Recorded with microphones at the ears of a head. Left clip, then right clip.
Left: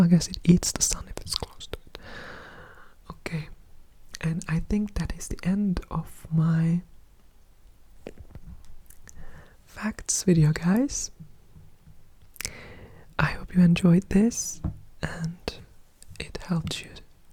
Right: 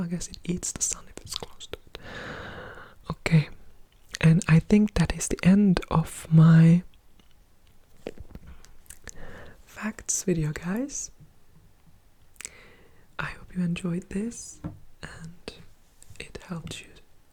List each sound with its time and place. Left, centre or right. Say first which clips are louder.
0.0 s speech: left 11 dB; left
1.6 s whispering: left 1 dB; centre
2.4 s whispering: right 6 dB; right
4.2 s speech: right 9 dB; right
8.9 s a sound: right 8 dB; right
10.3 s speech: left 6 dB; left
12.4 s whispering: left 7 dB; left
16.5 s speech: left 6 dB; left